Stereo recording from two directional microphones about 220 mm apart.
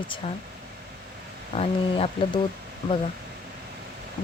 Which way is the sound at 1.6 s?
25° left (ahead or behind).